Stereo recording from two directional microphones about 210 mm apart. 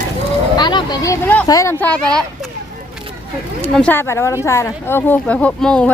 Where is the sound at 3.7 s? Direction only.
5° left (ahead or behind).